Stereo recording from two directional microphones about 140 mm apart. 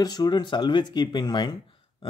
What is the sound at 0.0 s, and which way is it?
Speech, 30° left (ahead or behind).